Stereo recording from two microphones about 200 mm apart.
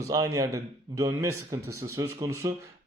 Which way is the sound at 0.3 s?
15° right (ahead or behind).